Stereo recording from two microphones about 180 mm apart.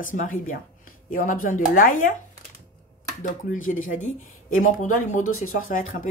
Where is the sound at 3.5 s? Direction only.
45° left (ahead or behind).